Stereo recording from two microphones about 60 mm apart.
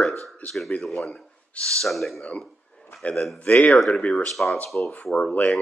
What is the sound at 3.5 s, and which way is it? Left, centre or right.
Speech, left.